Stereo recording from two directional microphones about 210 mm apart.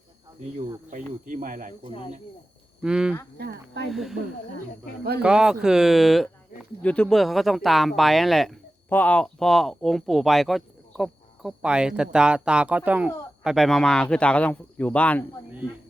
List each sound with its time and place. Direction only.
0.9 s speech: 40° right (ahead or behind)
2.8 s speech: 5° right (ahead or behind)
3.3 s speech: 50° right (ahead or behind)
3.8 s speech: centre (ahead or behind)
5.2 s speech: 5° right (ahead or behind)